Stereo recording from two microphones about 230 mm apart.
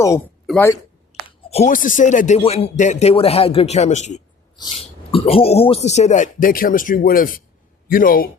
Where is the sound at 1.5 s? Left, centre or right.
Left.